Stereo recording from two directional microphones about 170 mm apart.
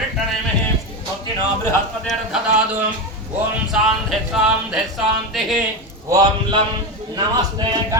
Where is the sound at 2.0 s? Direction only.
5° right (ahead or behind).